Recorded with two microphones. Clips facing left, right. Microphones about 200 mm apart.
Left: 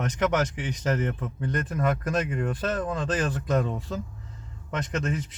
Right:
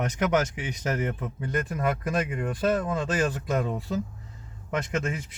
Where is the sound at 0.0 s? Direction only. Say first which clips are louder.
Even; 10° right (ahead or behind).